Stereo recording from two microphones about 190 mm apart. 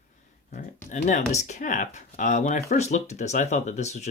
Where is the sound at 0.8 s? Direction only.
40° left (ahead or behind).